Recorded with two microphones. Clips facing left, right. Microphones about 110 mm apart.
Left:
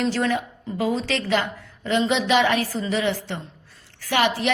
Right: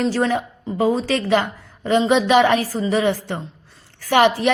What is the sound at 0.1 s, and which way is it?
A woman's voice, 40° right (ahead or behind).